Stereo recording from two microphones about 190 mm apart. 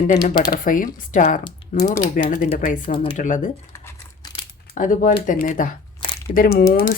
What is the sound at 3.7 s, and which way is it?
Crumpling, 15° left (ahead or behind).